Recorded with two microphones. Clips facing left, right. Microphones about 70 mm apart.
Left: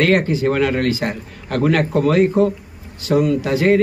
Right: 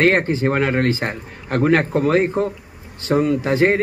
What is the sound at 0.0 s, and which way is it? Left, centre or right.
A man's voice, right.